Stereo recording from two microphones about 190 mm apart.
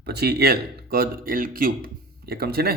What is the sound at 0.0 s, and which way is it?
Speech, 55° right (ahead or behind).